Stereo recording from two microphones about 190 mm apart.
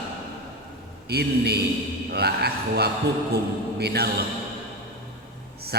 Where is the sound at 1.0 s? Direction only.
55° right (ahead or behind).